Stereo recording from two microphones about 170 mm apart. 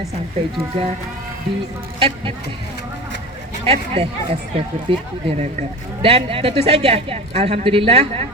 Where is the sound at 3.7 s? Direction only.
35° right (ahead or behind).